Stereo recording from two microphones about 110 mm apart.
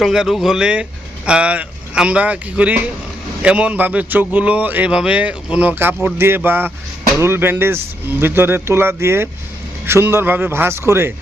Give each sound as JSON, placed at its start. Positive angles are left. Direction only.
{"t": 0.0, "sound": "a man's voice", "side_deg": -5}